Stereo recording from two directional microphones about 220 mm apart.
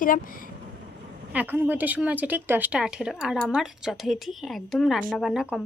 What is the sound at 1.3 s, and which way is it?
Speech, 10° right (ahead or behind).